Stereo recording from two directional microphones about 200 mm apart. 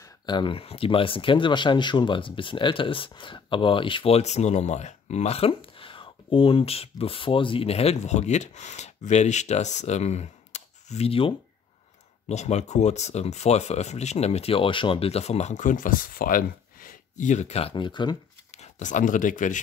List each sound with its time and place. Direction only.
0.0 s speech: 25° left (ahead or behind)
18.5 s speech: 35° left (ahead or behind)